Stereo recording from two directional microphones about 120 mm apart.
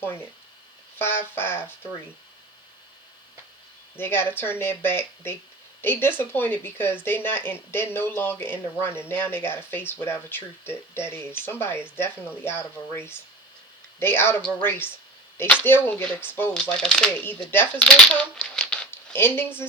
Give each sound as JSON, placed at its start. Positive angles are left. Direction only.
{"t": 0.9, "sound": "speech", "side_deg": 20}
{"t": 3.9, "sound": "speech", "side_deg": 20}
{"t": 16.6, "sound": "speech", "side_deg": 5}
{"t": 17.2, "sound": "speech", "side_deg": 20}